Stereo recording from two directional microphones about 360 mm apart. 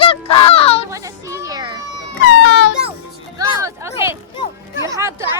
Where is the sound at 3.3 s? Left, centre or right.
Centre.